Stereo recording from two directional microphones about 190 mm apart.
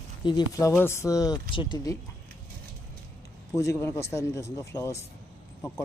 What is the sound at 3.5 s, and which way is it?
Speech, 15° left (ahead or behind).